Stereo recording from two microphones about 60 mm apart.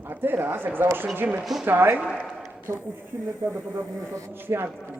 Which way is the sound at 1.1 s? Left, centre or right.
Right.